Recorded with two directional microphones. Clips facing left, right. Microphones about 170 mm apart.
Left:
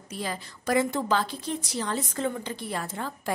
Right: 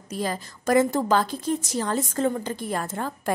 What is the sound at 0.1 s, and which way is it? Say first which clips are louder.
A woman's voice: right 5 dB; 45° right (ahead or behind).